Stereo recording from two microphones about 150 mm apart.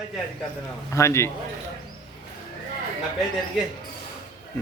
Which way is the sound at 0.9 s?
20° left (ahead or behind).